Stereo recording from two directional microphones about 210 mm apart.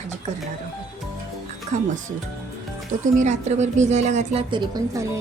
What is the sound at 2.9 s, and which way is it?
Speech, 40° right (ahead or behind).